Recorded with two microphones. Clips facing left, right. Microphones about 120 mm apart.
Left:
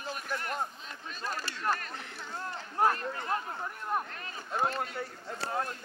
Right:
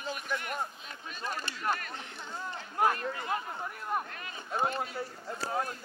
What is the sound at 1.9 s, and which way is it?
Speech, 15° right (ahead or behind).